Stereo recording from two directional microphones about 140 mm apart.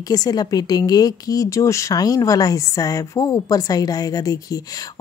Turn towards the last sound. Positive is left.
turn(degrees=25)  # may be behind; listen again after turning